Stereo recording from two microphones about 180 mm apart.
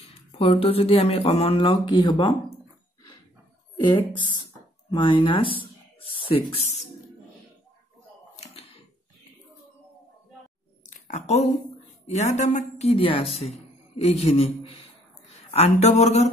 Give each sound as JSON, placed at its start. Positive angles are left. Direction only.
{"t": 0.4, "sound": "speech", "side_deg": 30}
{"t": 3.8, "sound": "speech", "side_deg": 25}
{"t": 10.9, "sound": "a sound", "side_deg": 40}
{"t": 12.1, "sound": "speech", "side_deg": 40}